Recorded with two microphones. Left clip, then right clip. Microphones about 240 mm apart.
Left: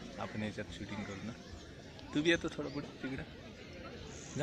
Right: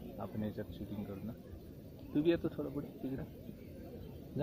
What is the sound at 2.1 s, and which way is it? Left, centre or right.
Speech, centre.